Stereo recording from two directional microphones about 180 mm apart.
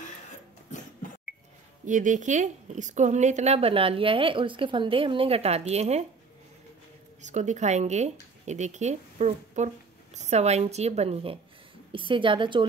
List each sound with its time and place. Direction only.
1.9 s a woman's voice: 45° right (ahead or behind)
7.2 s a woman's voice: 40° right (ahead or behind)